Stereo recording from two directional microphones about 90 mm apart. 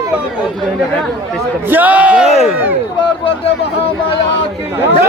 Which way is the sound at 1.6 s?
20° right (ahead or behind).